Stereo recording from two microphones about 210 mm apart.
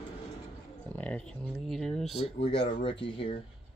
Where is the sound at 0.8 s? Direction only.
5° left (ahead or behind).